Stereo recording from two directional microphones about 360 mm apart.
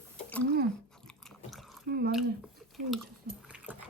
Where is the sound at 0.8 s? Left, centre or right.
Centre.